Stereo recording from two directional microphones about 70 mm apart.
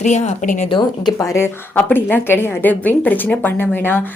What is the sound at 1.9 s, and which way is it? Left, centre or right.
Speech, left.